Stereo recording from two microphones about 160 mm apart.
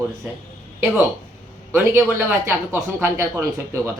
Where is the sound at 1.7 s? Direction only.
10° right (ahead or behind).